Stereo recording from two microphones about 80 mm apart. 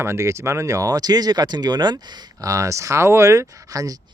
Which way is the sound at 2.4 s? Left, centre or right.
Right.